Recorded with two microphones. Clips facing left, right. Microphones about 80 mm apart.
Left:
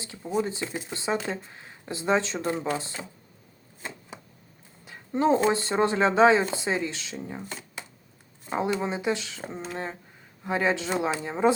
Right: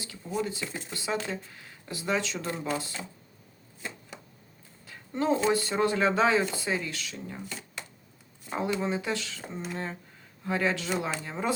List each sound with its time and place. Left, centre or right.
0.0 s speech: left
4.9 s a sound: left
5.4 s speech: left
8.4 s speech: left
10.4 s speech: centre